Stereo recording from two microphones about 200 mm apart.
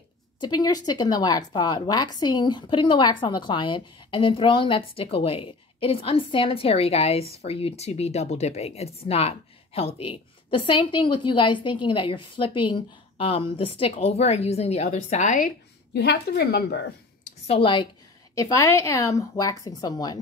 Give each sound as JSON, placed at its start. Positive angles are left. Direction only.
{"t": 0.4, "sound": "speech", "side_deg": 20}
{"t": 15.9, "sound": "a woman's voice", "side_deg": 55}
{"t": 17.5, "sound": "speech", "side_deg": 25}